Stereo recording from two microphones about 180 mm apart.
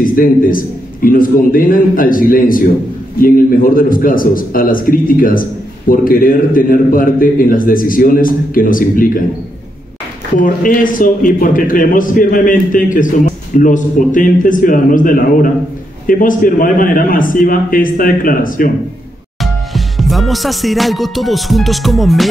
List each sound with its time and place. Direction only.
0.0 s a man's voice: 50° left (ahead or behind)
10.4 s a man's voice: 50° left (ahead or behind)
19.4 s music: centre (ahead or behind)